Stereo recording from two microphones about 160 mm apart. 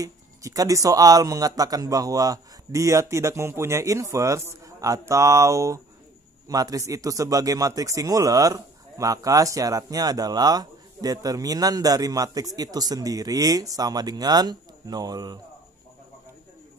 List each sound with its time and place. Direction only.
0.0 s a man's voice: 20° right (ahead or behind)